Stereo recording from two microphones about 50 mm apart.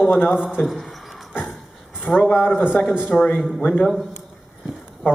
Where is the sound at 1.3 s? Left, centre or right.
Centre.